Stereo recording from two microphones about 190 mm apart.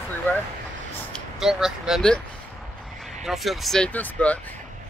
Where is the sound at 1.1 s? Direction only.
Centre (ahead or behind).